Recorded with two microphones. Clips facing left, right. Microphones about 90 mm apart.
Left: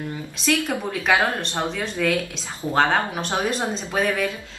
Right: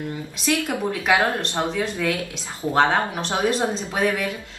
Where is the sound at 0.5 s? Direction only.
10° right (ahead or behind).